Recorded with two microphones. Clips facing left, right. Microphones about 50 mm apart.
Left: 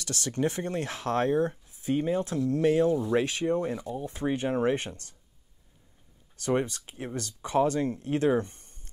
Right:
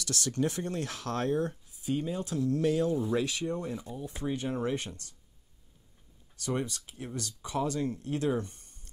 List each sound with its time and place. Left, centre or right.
0.0 s speech: left
1.8 s speech: left
6.3 s speech: left